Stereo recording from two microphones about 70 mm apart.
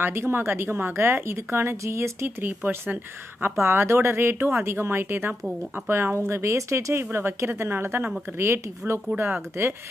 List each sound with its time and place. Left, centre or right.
0.0 s speech: right